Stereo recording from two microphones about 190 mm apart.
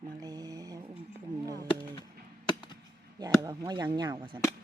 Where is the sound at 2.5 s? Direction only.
20° left (ahead or behind).